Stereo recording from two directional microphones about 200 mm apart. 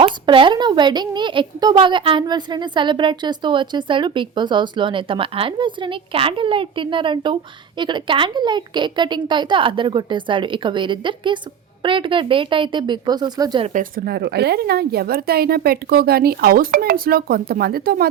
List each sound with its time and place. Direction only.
0.0 s speech: 25° right (ahead or behind)
13.7 s a woman's voice: 45° right (ahead or behind)